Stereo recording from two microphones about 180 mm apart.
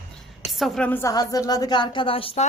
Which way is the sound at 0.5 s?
Centre (ahead or behind).